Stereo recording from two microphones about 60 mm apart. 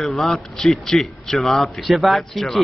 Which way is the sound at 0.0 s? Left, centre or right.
Centre.